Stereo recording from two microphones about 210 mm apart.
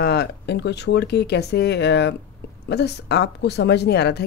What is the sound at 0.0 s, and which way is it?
A woman's voice, 50° left (ahead or behind).